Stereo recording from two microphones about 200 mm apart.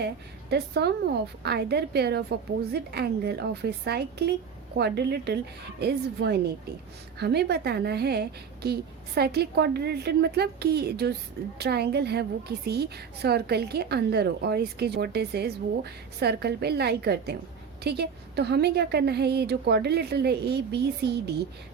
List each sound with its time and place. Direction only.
0.5 s a woman's voice: 55° right (ahead or behind)